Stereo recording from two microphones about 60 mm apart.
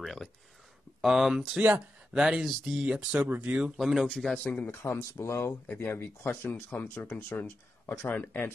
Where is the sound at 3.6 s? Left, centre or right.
Centre.